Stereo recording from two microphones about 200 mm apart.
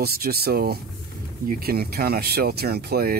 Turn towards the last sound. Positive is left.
turn(degrees=-50)  # may be behind; listen again after turning